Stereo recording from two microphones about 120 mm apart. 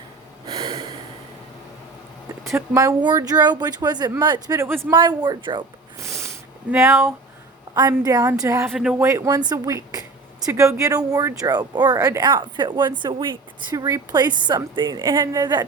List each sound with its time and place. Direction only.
0.4 s a sound: 45° right (ahead or behind)
2.4 s speech: 25° right (ahead or behind)
3.0 s speech: 35° right (ahead or behind)
4.9 s speech: 35° right (ahead or behind)
6.0 s a sound: 25° right (ahead or behind)
6.7 s speech: 20° right (ahead or behind)
8.7 s speech: 5° right (ahead or behind)
9.0 s speech: 25° right (ahead or behind)
13.7 s speech: 30° right (ahead or behind)